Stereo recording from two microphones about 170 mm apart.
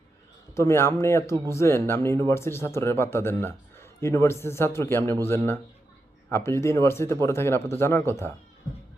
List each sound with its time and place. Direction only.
0.5 s speech: 15° left (ahead or behind)